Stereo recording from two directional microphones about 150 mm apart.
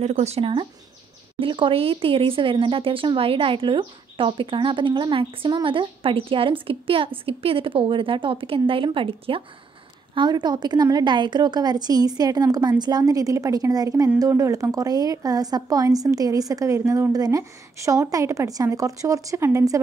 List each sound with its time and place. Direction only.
0.0 s a woman's voice: 45° right (ahead or behind); by 19.8 s 20° right (ahead or behind)